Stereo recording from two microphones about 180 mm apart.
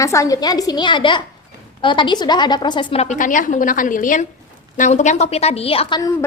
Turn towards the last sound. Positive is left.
turn(degrees=20)  # may be behind; listen again after turning